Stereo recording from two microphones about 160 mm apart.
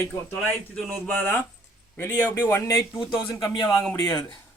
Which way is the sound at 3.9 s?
30° left (ahead or behind).